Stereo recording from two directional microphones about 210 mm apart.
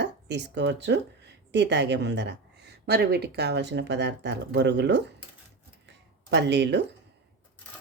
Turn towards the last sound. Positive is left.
turn(degrees=-55)  # may be behind; listen again after turning